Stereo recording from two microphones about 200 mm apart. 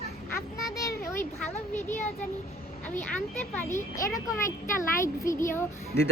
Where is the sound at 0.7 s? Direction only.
15° left (ahead or behind).